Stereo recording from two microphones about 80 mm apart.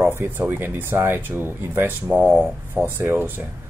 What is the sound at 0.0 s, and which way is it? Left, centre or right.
Speech, right.